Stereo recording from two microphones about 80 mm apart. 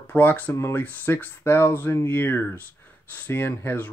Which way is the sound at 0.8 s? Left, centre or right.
Left.